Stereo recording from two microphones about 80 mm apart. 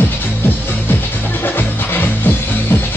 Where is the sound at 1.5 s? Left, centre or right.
Left.